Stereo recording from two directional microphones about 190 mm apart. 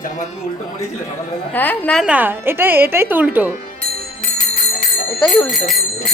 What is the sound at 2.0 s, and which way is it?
A woman's voice, 10° right (ahead or behind).